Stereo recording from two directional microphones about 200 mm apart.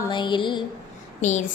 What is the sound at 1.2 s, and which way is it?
Child singing, 35° left (ahead or behind).